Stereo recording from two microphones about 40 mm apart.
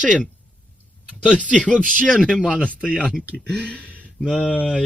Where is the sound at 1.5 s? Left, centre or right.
Left.